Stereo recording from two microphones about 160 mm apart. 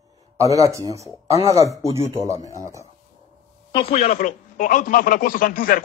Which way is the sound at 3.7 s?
35° left (ahead or behind).